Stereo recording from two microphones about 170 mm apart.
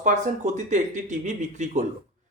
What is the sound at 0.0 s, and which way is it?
Speech, 45° right (ahead or behind).